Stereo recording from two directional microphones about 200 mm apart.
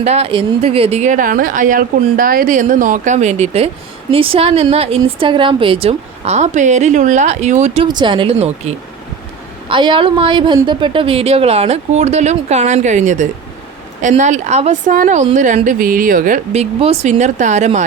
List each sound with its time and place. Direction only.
0.0 s a woman's voice: 30° right (ahead or behind)